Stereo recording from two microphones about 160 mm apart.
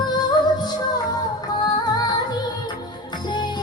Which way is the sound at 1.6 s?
25° left (ahead or behind).